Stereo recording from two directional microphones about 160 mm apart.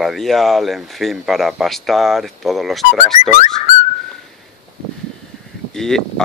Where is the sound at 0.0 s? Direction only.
Centre (ahead or behind).